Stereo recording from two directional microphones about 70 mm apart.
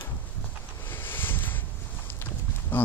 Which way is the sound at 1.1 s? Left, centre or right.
Left.